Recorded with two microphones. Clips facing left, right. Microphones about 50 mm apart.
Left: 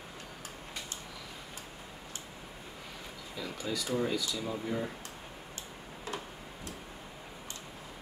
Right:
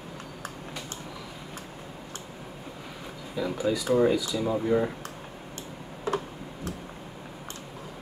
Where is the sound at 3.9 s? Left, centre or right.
Right.